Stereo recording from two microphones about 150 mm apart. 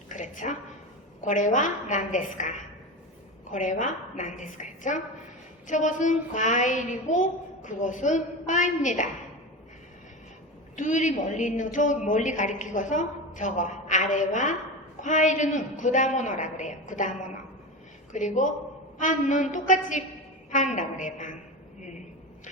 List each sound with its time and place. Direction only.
0.1 s a woman's voice: 55° left (ahead or behind)
10.8 s a woman's voice: 55° left (ahead or behind)